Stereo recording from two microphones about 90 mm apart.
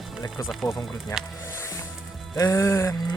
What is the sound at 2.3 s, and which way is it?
Speech, 35° left (ahead or behind).